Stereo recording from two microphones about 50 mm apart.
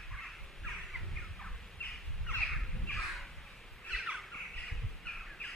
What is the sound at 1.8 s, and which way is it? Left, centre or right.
Bird, left.